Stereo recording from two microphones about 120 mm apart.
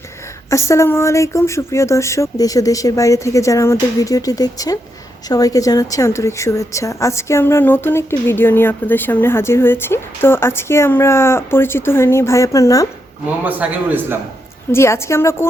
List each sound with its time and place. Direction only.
0.5 s a woman's voice: 25° left (ahead or behind)
13.4 s speech: 15° right (ahead or behind)
14.7 s a woman's voice: 20° left (ahead or behind)